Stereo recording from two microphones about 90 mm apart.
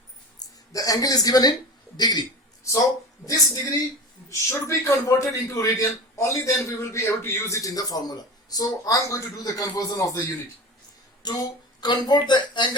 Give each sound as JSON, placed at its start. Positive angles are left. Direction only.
{"t": 0.3, "sound": "a woman's voice", "side_deg": 40}
{"t": 11.8, "sound": "speech", "side_deg": 55}